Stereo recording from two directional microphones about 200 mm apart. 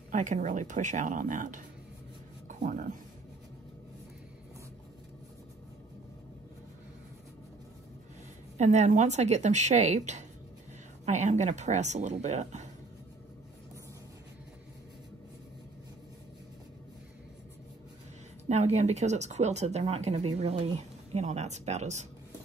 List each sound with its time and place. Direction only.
0.1 s speech: 40° right (ahead or behind)
2.4 s writing: 40° right (ahead or behind)
8.5 s speech: 35° right (ahead or behind)
18.5 s speech: 35° right (ahead or behind)